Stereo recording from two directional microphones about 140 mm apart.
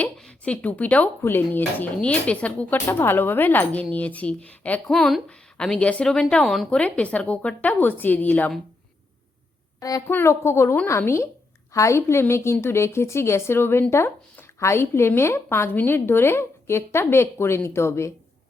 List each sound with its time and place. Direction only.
0.0 s a woman's voice: 5° left (ahead or behind)
10.1 s a woman's voice: 15° left (ahead or behind)